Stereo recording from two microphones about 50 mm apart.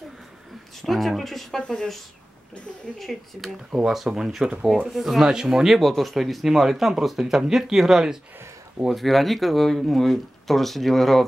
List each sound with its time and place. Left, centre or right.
0.8 s speech: centre
1.6 s speech: centre
3.0 s speech: centre